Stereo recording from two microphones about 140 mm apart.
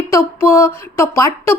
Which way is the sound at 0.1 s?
20° left (ahead or behind).